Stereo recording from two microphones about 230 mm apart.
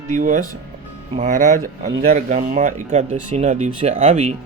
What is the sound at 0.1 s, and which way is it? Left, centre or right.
Speech, right.